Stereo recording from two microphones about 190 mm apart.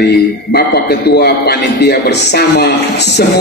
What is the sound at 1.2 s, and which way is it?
A man's voice, 55° left (ahead or behind).